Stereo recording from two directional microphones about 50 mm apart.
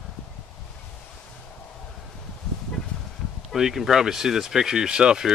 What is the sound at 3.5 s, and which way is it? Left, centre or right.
Speech, centre.